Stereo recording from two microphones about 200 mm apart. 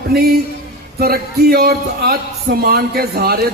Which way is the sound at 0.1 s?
50° right (ahead or behind).